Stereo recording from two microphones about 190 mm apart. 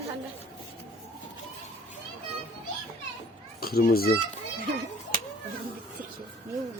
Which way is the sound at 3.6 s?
55° left (ahead or behind).